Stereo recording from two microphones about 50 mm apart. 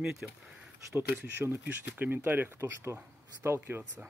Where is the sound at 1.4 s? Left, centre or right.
Right.